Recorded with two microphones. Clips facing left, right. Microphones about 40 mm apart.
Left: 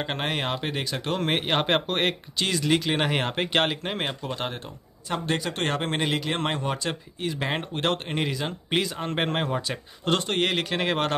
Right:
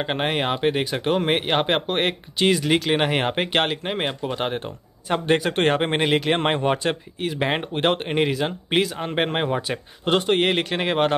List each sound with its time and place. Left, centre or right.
0.0 s a man's voice: centre
2.3 s a man's voice: right
5.1 s a man's voice: right; by 11.1 s centre